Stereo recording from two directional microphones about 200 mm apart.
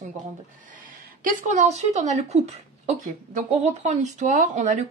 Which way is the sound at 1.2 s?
40° right (ahead or behind).